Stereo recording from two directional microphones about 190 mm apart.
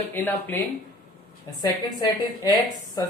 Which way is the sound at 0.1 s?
10° left (ahead or behind).